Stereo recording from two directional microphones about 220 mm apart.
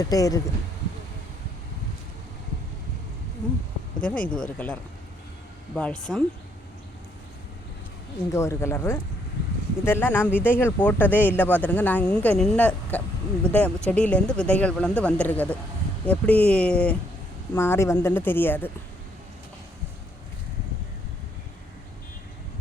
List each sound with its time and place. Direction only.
0.0 s speech: 15° left (ahead or behind)
4.0 s speech: 5° left (ahead or behind)
8.3 s speech: 15° left (ahead or behind)